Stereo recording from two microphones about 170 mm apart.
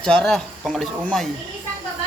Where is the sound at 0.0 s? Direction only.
5° left (ahead or behind).